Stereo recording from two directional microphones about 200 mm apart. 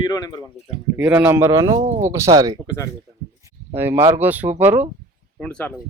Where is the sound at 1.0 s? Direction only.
10° right (ahead or behind).